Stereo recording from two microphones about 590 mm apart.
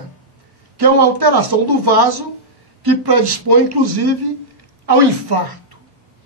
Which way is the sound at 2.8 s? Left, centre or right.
Right.